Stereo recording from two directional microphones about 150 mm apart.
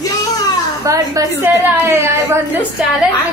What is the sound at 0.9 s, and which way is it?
A woman's voice, 20° right (ahead or behind).